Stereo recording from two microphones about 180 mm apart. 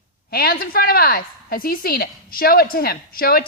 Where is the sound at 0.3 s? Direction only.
60° left (ahead or behind).